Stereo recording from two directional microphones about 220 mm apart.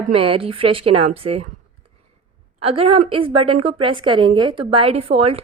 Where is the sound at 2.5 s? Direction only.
25° right (ahead or behind).